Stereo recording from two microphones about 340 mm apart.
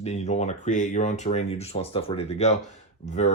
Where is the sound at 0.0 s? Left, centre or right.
Centre.